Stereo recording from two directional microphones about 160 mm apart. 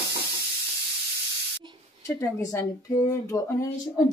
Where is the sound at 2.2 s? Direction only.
20° left (ahead or behind).